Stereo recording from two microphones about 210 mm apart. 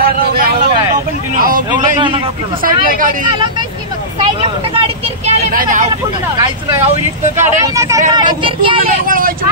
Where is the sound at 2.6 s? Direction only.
40° right (ahead or behind).